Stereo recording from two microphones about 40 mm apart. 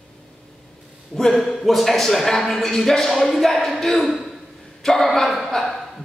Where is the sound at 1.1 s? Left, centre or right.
Centre.